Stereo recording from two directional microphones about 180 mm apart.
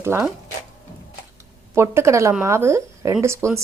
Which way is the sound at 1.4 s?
15° right (ahead or behind).